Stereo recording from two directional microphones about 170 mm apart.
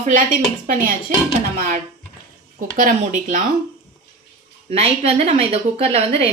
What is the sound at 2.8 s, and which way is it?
Speech, 55° right (ahead or behind).